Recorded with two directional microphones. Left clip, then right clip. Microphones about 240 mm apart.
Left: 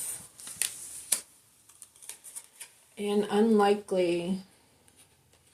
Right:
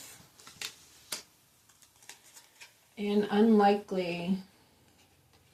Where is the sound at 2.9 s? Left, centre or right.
Left.